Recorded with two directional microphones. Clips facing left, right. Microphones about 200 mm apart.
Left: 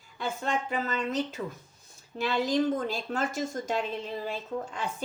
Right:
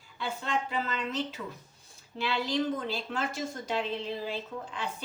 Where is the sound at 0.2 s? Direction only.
45° left (ahead or behind).